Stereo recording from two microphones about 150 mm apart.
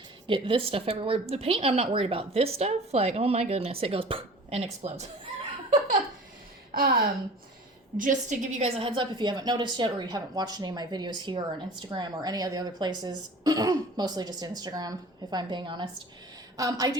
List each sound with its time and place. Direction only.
0.3 s a woman's voice: 35° right (ahead or behind)
6.7 s a woman's voice: 75° right (ahead or behind)
7.9 s a woman's voice: 60° right (ahead or behind); by 17.0 s 25° right (ahead or behind)